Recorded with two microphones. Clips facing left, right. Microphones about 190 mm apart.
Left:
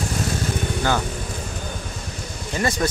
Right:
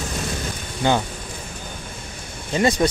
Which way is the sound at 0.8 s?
20° right (ahead or behind).